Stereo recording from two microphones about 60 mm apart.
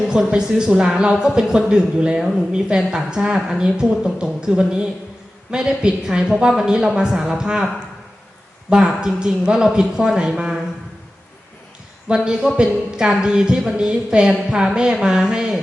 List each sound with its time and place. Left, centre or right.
0.1 s speech: centre
8.7 s speech: centre
12.0 s speech: centre